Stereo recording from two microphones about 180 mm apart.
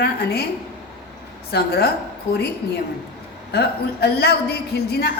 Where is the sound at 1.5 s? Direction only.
60° left (ahead or behind).